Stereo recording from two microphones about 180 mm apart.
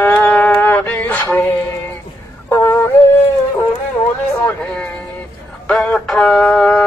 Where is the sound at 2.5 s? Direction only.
15° left (ahead or behind).